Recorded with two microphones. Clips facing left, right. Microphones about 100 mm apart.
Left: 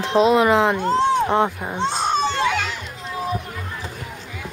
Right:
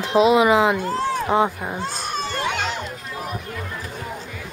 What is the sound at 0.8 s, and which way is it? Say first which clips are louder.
Speech: left 5 dB; 20° left (ahead or behind).